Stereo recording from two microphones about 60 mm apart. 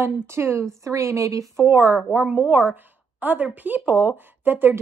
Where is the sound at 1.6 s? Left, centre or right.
Right.